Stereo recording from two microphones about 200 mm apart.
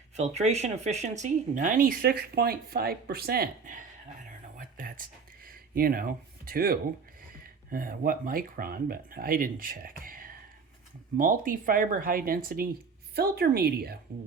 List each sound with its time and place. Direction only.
0.2 s speech: 35° right (ahead or behind)
4.3 s whispering: 45° right (ahead or behind)
7.2 s speech: 45° right (ahead or behind)